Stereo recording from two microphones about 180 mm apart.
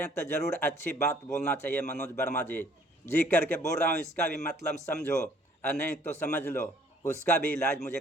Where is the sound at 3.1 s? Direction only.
10° left (ahead or behind).